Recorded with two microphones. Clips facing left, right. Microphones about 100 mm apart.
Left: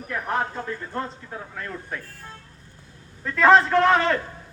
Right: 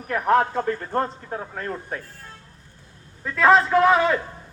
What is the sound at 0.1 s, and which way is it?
Speech, 60° right (ahead or behind).